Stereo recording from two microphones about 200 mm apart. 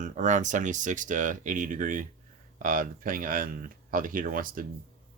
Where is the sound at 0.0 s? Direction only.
40° right (ahead or behind).